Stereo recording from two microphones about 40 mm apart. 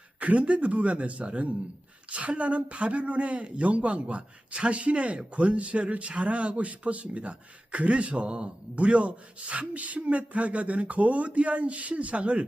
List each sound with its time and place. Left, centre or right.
0.2 s speech: right